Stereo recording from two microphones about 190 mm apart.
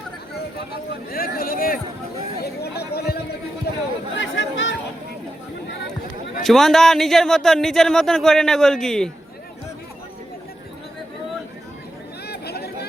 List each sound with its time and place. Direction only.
1.1 s speech: 50° left (ahead or behind)
4.1 s speech: 75° left (ahead or behind)
6.4 s speech: centre (ahead or behind)
12.3 s chatter: 55° left (ahead or behind)